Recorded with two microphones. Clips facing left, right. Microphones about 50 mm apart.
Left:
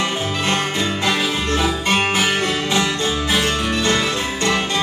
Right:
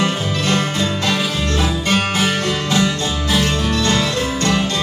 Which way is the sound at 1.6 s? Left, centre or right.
Centre.